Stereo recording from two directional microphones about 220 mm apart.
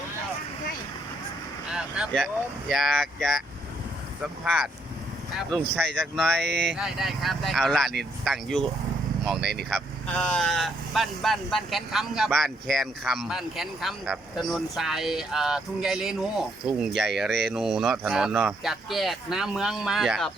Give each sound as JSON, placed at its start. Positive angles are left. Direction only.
{"t": 1.7, "sound": "speech", "side_deg": 0}
{"t": 6.5, "sound": "speech", "side_deg": -50}
{"t": 6.7, "sound": "speech", "side_deg": 0}